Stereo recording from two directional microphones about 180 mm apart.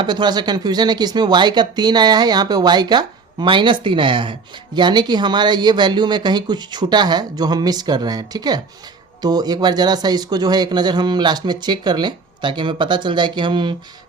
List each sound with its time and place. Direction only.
0.0 s speech: 25° right (ahead or behind)